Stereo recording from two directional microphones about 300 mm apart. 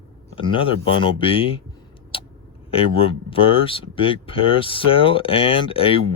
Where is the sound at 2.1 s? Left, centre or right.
Centre.